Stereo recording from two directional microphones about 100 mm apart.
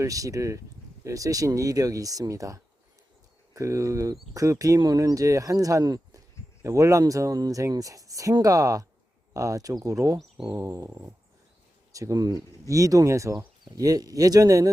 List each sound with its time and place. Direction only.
0.0 s speech: 35° right (ahead or behind)